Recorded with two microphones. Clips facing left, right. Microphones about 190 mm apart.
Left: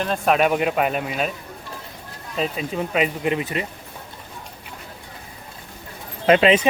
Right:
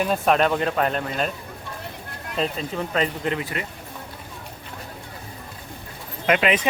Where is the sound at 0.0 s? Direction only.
5° right (ahead or behind).